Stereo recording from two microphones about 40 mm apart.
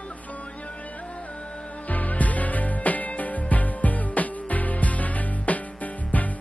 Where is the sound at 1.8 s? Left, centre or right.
Left.